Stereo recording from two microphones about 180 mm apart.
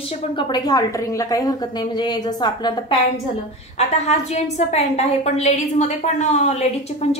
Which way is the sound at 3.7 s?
40° left (ahead or behind).